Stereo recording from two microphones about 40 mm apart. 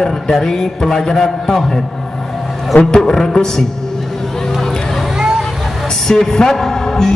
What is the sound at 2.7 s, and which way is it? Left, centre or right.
Speech, centre.